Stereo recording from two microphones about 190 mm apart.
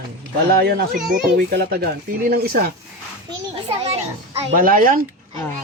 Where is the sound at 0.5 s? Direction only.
55° right (ahead or behind).